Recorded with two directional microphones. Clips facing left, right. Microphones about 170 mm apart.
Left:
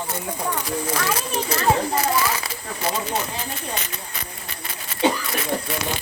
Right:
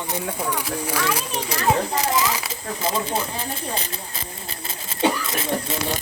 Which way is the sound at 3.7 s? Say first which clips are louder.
Right 1 dB; 30° right (ahead or behind).